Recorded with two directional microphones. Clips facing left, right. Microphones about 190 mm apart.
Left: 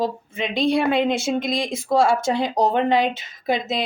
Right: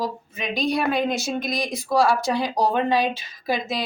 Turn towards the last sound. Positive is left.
turn(degrees=20)  # may be behind; listen again after turning